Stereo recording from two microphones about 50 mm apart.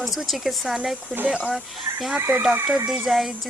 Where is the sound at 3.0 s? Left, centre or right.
Centre.